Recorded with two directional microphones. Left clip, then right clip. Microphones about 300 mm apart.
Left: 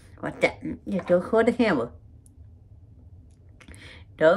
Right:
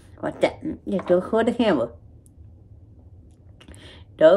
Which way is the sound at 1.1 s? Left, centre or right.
Left.